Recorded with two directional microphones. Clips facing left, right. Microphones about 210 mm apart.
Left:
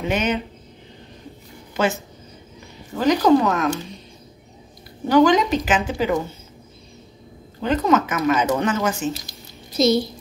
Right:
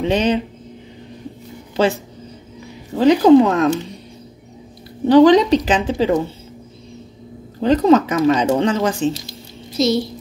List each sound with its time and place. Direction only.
0.0 s speech: 30° right (ahead or behind)
2.9 s speech: 30° right (ahead or behind)
5.0 s speech: 30° right (ahead or behind)
7.6 s speech: 35° right (ahead or behind)
9.8 s a child's voice: centre (ahead or behind)